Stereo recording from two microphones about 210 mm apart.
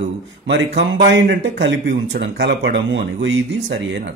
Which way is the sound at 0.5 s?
60° right (ahead or behind).